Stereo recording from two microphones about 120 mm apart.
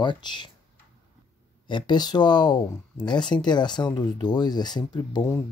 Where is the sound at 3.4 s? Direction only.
40° left (ahead or behind).